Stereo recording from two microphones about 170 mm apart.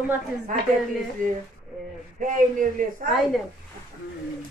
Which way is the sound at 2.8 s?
50° right (ahead or behind).